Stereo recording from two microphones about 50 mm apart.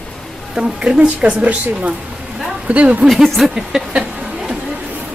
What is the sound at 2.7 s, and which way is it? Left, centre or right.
Speech, right.